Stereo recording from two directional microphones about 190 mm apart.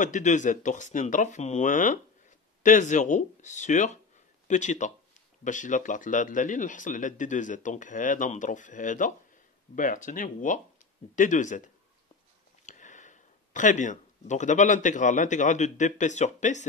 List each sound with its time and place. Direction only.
0.0 s speech: 40° left (ahead or behind)
12.6 s speech: 40° left (ahead or behind)